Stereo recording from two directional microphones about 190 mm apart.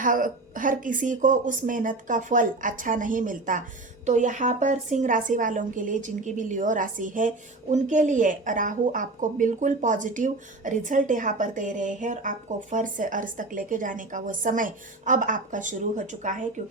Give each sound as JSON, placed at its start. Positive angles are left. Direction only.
{"t": 0.0, "sound": "a woman's voice", "side_deg": -45}